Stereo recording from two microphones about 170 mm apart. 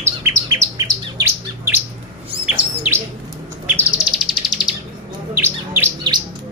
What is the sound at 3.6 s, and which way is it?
Bird, 10° right (ahead or behind).